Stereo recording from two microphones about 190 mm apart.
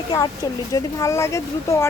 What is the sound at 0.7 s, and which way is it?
Speech, 15° left (ahead or behind).